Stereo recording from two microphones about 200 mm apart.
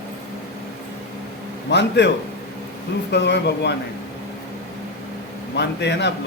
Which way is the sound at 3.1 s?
60° left (ahead or behind).